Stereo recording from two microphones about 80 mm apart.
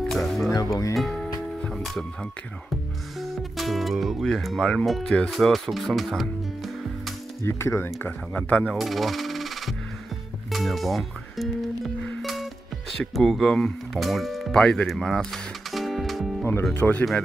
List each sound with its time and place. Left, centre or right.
0.0 s music: centre
0.5 s speech: left
0.9 s speech: centre
1.6 s music: centre
3.2 s speech: centre
7.4 s speech: left
8.4 s speech: centre
8.7 s music: centre
10.5 s speech: centre
12.2 s music: centre
13.0 s speech: centre
16.7 s speech: left